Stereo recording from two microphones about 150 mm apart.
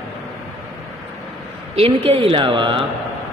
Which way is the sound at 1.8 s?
40° right (ahead or behind).